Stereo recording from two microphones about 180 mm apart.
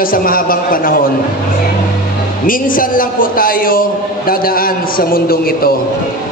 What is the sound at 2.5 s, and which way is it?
A man's voice, 50° left (ahead or behind).